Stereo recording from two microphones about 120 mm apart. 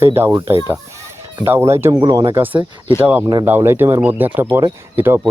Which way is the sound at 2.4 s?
15° right (ahead or behind).